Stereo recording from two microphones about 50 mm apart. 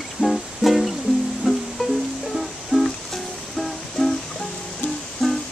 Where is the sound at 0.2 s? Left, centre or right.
Right.